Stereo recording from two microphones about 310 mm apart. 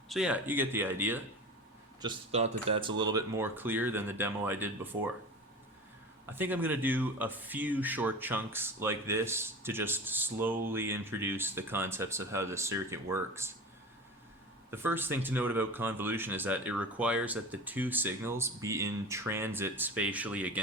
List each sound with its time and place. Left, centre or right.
0.1 s speech: centre
2.0 s speech: centre
6.3 s speech: centre
14.7 s speech: centre